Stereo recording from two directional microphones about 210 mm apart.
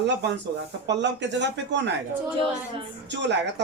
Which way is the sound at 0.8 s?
55° right (ahead or behind).